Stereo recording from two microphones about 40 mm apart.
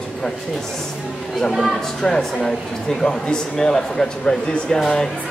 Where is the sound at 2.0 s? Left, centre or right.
Centre.